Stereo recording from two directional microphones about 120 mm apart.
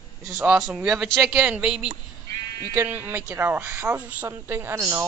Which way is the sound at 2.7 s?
20° right (ahead or behind).